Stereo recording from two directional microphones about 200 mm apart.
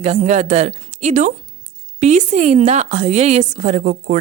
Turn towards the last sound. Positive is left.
turn(degrees=-40)  # may be behind; listen again after turning